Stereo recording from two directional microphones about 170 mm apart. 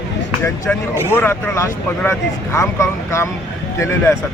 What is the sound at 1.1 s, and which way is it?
Speech, 15° left (ahead or behind).